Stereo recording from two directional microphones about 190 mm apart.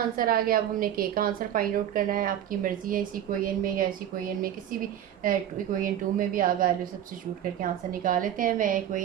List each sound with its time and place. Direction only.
0.2 s a woman's voice: 50° right (ahead or behind)